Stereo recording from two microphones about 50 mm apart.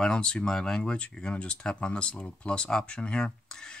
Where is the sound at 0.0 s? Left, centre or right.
Centre.